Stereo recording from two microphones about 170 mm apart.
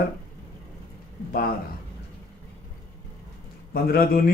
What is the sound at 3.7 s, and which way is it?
Speech, 60° left (ahead or behind).